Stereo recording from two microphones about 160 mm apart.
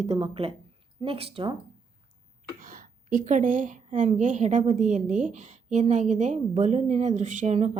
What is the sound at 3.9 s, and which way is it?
A woman's voice, 50° right (ahead or behind).